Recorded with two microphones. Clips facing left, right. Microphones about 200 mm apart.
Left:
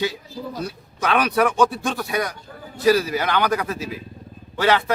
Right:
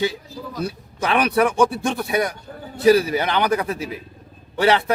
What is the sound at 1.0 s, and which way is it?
A man's voice, 20° right (ahead or behind).